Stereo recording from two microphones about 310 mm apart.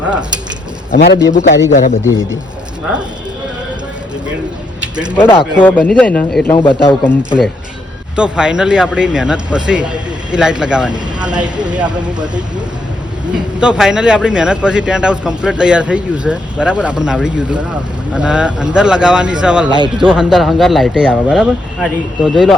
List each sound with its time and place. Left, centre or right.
0.9 s a man's voice: left
5.1 s speech: centre
8.1 s speech: centre
10.9 s speech: centre
13.6 s speech: centre